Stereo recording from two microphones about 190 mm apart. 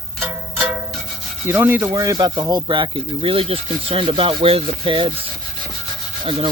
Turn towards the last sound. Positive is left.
turn(degrees=-25)  # may be behind; listen again after turning